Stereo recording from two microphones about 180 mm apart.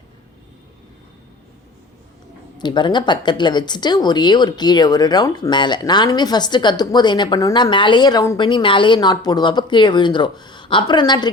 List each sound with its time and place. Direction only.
2.6 s speech: 25° left (ahead or behind)